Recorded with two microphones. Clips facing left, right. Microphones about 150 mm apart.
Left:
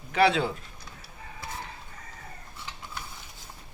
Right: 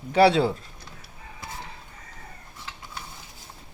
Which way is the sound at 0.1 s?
30° right (ahead or behind).